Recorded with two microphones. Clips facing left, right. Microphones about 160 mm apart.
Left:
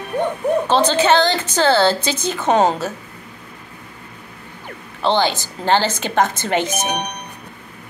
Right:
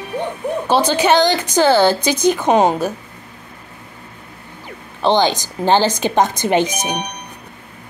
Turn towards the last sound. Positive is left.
turn(degrees=-15)  # may be behind; listen again after turning